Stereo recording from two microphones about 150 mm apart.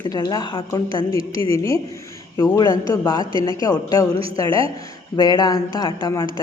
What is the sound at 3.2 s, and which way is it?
Speech, 35° right (ahead or behind).